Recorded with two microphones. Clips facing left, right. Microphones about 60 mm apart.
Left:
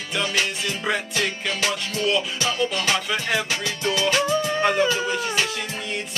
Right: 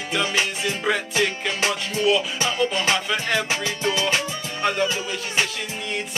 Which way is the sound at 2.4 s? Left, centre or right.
Centre.